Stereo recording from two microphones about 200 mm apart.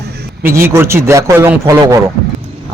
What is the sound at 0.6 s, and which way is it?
Speech, 15° right (ahead or behind).